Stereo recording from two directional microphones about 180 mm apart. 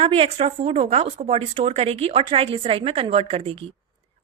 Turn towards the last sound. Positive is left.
turn(degrees=-35)  # may be behind; listen again after turning